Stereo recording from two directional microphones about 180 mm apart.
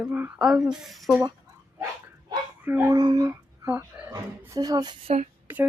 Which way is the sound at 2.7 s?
10° right (ahead or behind).